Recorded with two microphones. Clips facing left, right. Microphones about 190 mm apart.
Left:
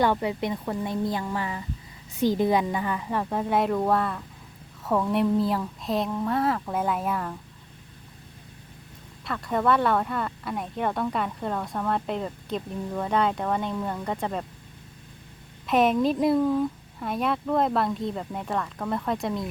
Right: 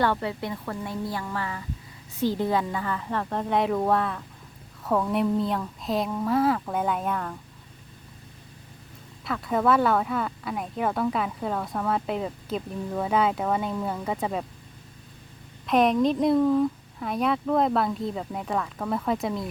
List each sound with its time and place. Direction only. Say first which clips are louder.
0.0 s a woman's voice: left 2 dB; 15° left (ahead or behind)
9.2 s speech: right 1 dB; centre (ahead or behind)
15.6 s speech: right 1 dB; centre (ahead or behind)